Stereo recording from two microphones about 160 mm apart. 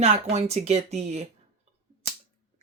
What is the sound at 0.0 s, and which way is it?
Speech, 40° right (ahead or behind).